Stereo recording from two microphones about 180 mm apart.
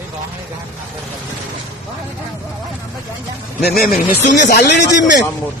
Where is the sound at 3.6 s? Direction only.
60° left (ahead or behind); by 5.2 s 75° left (ahead or behind).